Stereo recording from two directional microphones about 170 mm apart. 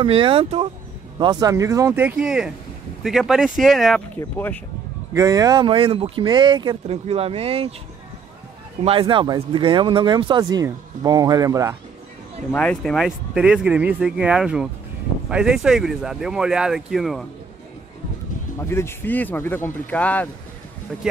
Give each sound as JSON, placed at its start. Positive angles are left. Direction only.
{"t": 0.0, "sound": "speech", "side_deg": -30}
{"t": 1.2, "sound": "speech", "side_deg": -25}
{"t": 4.2, "sound": "speech", "side_deg": 10}
{"t": 5.1, "sound": "speech", "side_deg": -20}
{"t": 9.0, "sound": "speech", "side_deg": -25}
{"t": 12.5, "sound": "speech", "side_deg": 5}
{"t": 18.6, "sound": "speech", "side_deg": 15}